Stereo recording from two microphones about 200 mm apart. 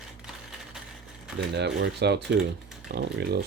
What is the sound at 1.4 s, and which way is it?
Speech, 55° right (ahead or behind).